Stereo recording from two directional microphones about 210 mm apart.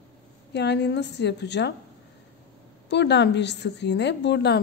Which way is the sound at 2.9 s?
55° left (ahead or behind).